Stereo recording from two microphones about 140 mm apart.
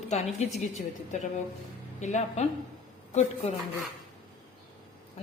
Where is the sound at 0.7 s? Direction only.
60° left (ahead or behind).